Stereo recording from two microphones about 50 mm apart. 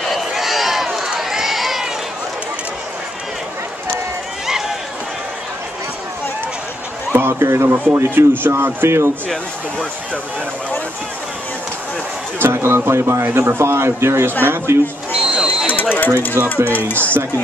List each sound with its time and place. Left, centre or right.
0.0 s run: centre
7.1 s a man's voice: right
12.4 s a man's voice: right
15.2 s a sound: centre
15.6 s a sound: left
16.6 s speech: left